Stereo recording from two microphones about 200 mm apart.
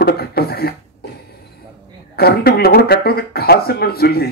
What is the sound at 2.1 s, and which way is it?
Speech, 50° left (ahead or behind).